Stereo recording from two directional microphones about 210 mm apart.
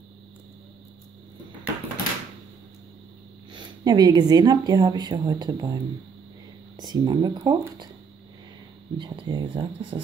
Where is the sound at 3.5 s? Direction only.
20° right (ahead or behind).